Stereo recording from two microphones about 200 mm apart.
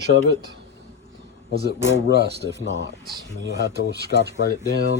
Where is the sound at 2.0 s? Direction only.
55° left (ahead or behind).